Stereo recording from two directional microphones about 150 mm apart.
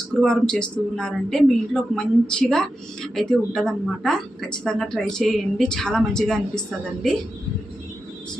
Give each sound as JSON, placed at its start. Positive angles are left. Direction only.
{"t": 0.2, "sound": "a woman's voice", "side_deg": 5}